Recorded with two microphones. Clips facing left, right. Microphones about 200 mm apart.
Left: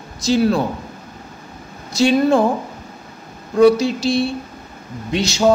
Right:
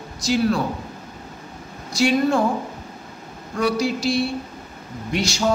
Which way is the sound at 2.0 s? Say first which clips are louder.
Left 4 dB; 25° left (ahead or behind).